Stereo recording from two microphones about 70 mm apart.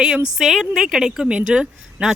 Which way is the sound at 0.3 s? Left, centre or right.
Centre.